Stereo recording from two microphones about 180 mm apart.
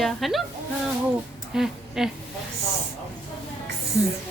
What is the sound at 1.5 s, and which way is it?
Speech, 5° right (ahead or behind).